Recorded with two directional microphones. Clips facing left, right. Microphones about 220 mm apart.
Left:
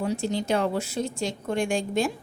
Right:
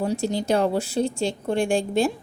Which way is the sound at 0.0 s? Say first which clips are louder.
Right 3 dB; 35° right (ahead or behind).